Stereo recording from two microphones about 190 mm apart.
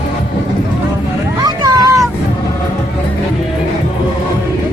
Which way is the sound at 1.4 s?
20° right (ahead or behind).